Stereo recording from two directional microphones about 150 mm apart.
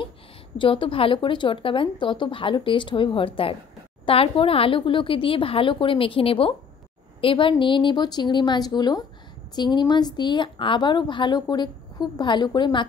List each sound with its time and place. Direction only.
0.6 s a woman's voice: 35° left (ahead or behind)